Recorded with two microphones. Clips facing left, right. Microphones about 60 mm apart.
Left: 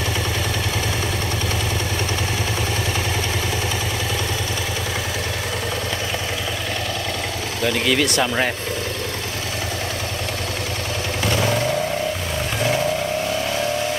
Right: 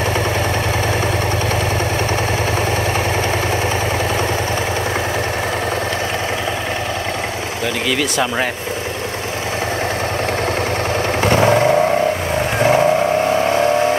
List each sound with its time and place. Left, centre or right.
7.6 s speech: centre
11.2 s vehicle: right